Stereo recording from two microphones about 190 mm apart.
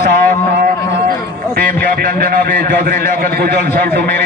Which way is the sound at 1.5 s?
50° right (ahead or behind).